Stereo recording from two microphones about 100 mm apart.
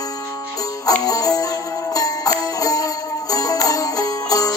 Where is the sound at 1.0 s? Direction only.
40° left (ahead or behind).